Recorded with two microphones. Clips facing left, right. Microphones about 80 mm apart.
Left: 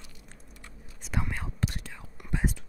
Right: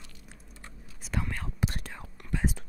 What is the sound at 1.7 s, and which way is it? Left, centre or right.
Whispering, right.